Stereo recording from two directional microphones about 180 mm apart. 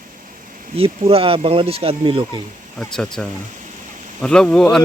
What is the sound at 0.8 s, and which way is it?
Speech, 30° right (ahead or behind).